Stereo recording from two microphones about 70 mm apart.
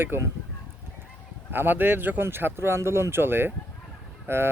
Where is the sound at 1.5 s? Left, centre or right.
Right.